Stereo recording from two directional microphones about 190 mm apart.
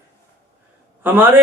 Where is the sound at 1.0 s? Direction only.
10° right (ahead or behind).